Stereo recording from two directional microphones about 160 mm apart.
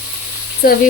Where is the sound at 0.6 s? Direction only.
65° left (ahead or behind).